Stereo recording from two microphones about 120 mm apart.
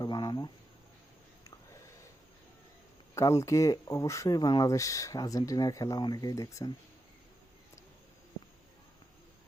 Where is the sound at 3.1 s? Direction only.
25° left (ahead or behind).